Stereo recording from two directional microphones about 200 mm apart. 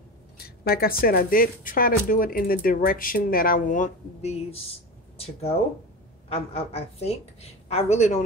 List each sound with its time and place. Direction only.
0.4 s a woman's voice: 50° left (ahead or behind); by 8.2 s 35° left (ahead or behind)